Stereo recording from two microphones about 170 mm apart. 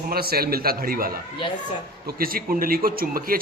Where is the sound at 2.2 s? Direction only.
60° right (ahead or behind).